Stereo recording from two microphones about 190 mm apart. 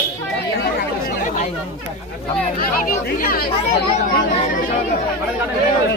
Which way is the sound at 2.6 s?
50° left (ahead or behind).